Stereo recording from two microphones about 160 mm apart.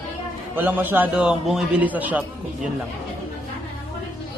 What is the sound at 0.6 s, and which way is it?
A man's voice, 10° right (ahead or behind).